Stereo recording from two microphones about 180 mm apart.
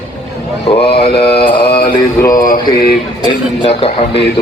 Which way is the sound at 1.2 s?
30° left (ahead or behind).